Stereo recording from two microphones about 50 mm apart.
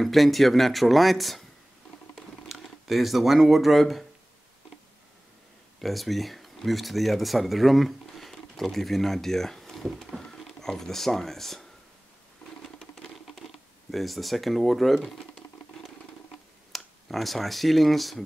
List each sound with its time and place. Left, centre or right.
0.0 s speech: centre
2.1 s typing: centre
5.8 s speech: centre
12.7 s patter: centre
13.9 s speech: centre
16.7 s speech: centre